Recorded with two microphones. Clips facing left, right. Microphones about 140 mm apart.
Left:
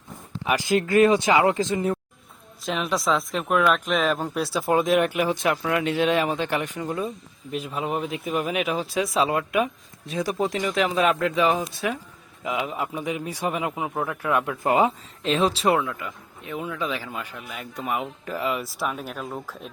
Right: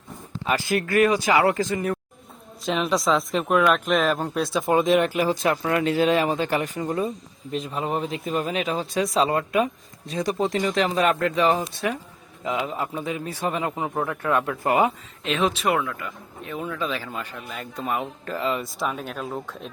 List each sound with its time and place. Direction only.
0.4 s speech: 15° left (ahead or behind)
2.6 s a man's voice: centre (ahead or behind); by 14.9 s 20° left (ahead or behind)
15.2 s speech: 35° left (ahead or behind)
15.8 s a man's voice: 20° left (ahead or behind); by 19.7 s centre (ahead or behind)